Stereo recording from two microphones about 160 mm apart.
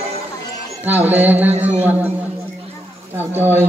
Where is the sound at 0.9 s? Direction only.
10° right (ahead or behind).